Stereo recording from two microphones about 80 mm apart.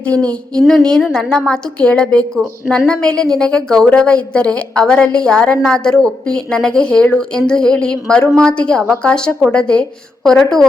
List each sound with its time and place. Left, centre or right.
0.1 s child singing: right
0.8 s a woman's voice: centre